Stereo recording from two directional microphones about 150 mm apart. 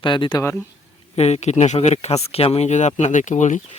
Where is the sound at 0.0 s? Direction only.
35° left (ahead or behind).